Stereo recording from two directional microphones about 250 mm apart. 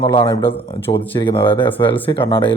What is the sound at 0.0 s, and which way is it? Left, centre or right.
A man's voice, centre.